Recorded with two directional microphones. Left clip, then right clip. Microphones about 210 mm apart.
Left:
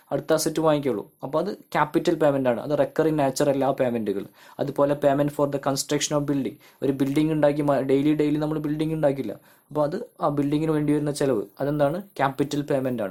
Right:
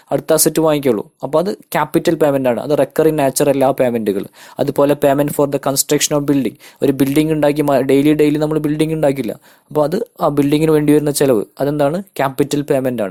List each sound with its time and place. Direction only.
0.1 s speech: 35° right (ahead or behind)